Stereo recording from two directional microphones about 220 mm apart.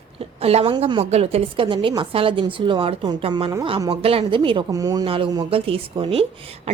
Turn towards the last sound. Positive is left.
turn(degrees=-25)  # may be behind; listen again after turning